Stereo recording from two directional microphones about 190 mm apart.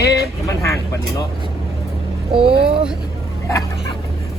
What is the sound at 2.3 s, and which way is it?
Speech, 30° right (ahead or behind).